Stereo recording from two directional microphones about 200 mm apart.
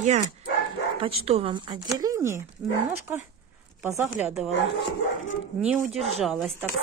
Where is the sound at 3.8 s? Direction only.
10° right (ahead or behind).